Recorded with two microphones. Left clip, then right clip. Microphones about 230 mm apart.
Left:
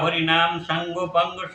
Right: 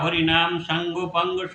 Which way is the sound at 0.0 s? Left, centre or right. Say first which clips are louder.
Left 1 dB; centre.